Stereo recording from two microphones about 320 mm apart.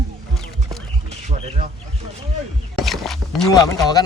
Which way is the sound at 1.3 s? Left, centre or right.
Right.